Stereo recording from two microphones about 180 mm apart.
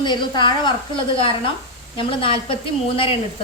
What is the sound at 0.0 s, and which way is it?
A woman's voice, 25° left (ahead or behind).